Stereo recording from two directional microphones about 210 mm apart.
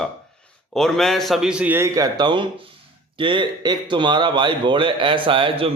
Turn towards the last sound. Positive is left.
turn(degrees=-25)  # may be behind; listen again after turning